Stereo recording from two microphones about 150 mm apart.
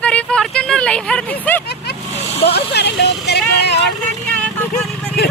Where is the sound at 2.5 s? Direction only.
90° left.